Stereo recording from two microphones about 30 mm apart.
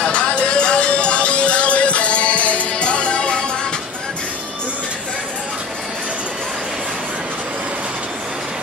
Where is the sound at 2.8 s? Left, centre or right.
Left.